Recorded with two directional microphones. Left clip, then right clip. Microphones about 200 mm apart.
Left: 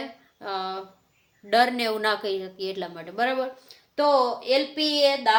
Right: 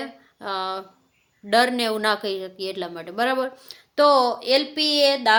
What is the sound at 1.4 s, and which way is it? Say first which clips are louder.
A woman's voice: right 2 dB; 30° right (ahead or behind).